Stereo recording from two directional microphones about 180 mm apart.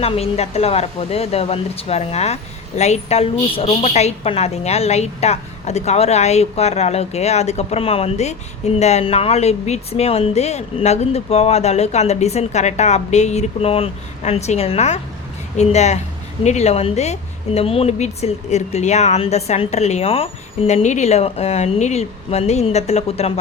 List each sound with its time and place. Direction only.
0.0 s speech: 35° left (ahead or behind)